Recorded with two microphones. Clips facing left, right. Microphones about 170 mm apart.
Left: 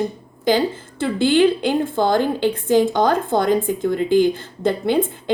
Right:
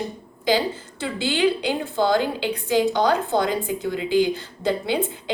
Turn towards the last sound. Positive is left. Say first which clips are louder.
# left 4 dB
turn(degrees=50)  # may be behind; listen again after turning